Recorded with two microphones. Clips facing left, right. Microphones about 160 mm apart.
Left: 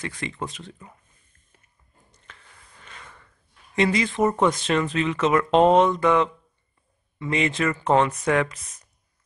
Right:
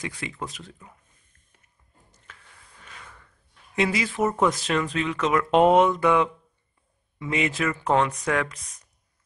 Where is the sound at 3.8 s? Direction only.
5° right (ahead or behind).